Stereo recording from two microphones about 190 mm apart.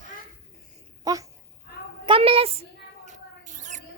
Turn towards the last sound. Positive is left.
turn(degrees=-40)  # may be behind; listen again after turning